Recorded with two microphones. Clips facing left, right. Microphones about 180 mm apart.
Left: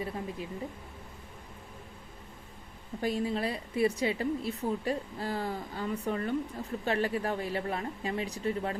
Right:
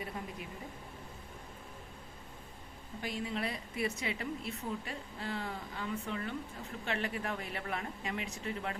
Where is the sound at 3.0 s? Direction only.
35° left (ahead or behind).